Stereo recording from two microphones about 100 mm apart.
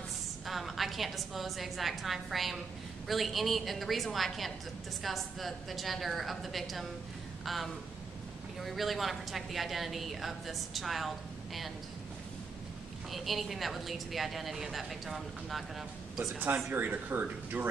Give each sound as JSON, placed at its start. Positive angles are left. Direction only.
{"t": 0.5, "sound": "a woman's voice", "side_deg": 0}
{"t": 13.1, "sound": "a woman's voice", "side_deg": 0}
{"t": 16.3, "sound": "speech", "side_deg": -15}